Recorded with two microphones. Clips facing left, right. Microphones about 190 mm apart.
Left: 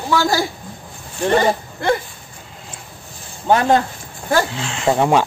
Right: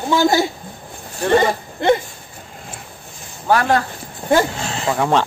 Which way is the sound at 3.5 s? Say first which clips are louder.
Left 2 dB; 20° left (ahead or behind).